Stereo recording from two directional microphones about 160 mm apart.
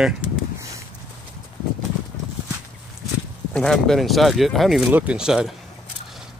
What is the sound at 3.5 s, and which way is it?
Speech, centre (ahead or behind).